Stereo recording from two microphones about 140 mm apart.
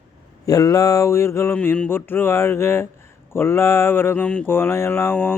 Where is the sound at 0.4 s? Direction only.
25° left (ahead or behind).